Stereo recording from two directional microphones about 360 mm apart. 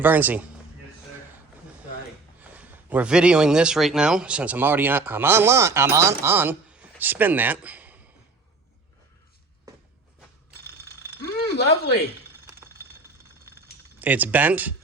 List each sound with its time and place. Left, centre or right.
0.0 s speech: centre
2.4 s speech: centre
11.2 s a sound: left
14.0 s speech: centre